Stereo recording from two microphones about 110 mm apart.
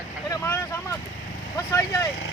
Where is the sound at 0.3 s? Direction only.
25° left (ahead or behind).